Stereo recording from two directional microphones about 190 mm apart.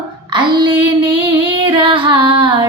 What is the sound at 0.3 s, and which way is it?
Female singing, 25° right (ahead or behind).